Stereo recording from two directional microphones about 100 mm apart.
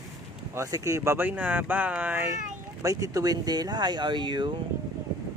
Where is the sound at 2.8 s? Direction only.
30° right (ahead or behind); by 4.6 s 50° right (ahead or behind).